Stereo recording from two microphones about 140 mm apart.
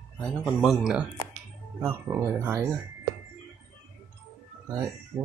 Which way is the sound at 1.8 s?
20° right (ahead or behind).